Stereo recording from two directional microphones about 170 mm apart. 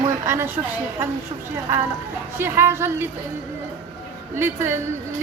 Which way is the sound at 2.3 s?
15° right (ahead or behind).